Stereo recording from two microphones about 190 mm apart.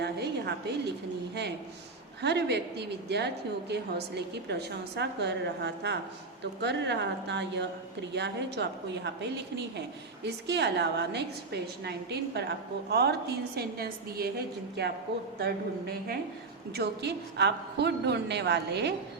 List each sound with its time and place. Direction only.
0.0 s a woman's voice: 60° right (ahead or behind)
2.2 s a woman's voice: 65° right (ahead or behind)